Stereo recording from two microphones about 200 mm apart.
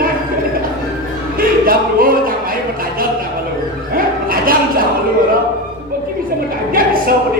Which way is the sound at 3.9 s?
45° right (ahead or behind).